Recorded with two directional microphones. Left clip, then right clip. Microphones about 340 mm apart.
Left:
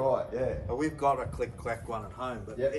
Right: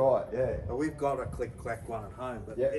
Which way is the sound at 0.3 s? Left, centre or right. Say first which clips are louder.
Right 1 dB; right.